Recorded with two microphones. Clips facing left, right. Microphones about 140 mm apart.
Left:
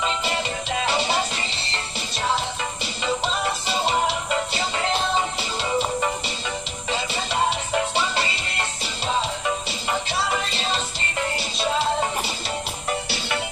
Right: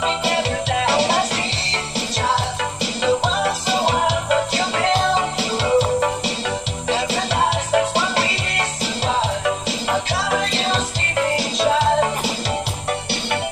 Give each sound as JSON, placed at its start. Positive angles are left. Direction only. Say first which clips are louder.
{"t": 0.0, "sound": "music", "louder": "right 5 dB", "side_deg": -75}
{"t": 12.9, "sound": "music", "louder": "right 3 dB", "side_deg": -60}